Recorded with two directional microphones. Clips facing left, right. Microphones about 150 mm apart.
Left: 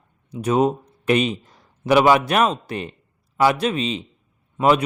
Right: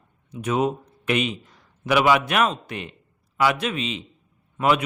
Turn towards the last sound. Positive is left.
turn(degrees=35)  # may be behind; listen again after turning